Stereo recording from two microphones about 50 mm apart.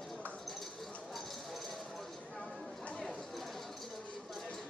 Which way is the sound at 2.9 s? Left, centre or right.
Centre.